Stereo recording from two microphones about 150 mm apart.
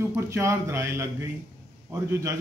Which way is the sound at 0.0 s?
15° right (ahead or behind).